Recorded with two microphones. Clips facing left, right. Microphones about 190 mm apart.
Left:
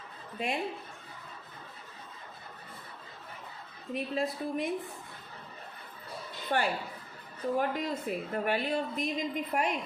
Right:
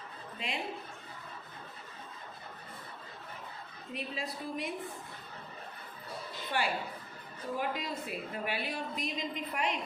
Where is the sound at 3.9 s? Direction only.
50° left (ahead or behind).